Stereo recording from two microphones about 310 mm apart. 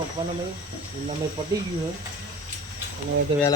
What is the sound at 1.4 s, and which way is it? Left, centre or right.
Speech, centre.